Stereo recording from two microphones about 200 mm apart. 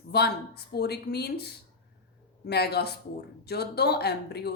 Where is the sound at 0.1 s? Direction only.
55° left (ahead or behind).